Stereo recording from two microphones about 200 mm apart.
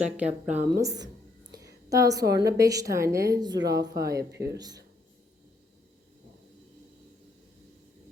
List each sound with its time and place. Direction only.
0.0 s speech: 5° right (ahead or behind)
0.6 s a woman's voice: 15° right (ahead or behind)